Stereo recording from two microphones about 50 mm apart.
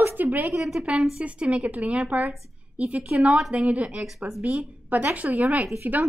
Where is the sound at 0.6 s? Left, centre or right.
Centre.